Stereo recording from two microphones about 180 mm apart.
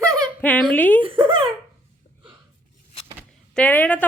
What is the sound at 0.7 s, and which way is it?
Speech, 10° left (ahead or behind).